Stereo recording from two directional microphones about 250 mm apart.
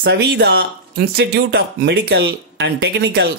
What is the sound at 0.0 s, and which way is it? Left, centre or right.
Speech, right.